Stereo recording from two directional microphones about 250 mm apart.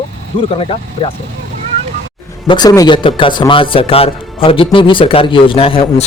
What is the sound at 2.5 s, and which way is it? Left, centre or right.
A man's voice, centre.